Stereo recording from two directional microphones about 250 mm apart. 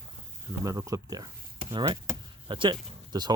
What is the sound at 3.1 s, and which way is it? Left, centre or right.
Speech, centre.